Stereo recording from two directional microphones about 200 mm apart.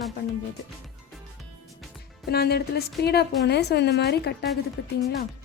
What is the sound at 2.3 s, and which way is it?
A woman's voice, 50° left (ahead or behind).